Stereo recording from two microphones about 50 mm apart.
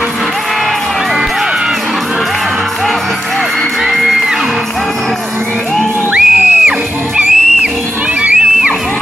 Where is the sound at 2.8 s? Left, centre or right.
Centre.